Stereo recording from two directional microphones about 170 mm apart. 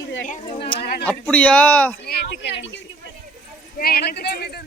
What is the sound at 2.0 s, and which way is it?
Speech, 75° left (ahead or behind).